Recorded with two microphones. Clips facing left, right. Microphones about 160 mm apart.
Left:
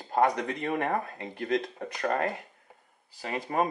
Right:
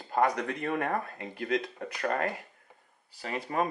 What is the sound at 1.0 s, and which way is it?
Speech, 25° left (ahead or behind).